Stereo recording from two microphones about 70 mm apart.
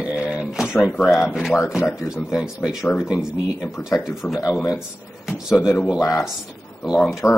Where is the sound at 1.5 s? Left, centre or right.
Left.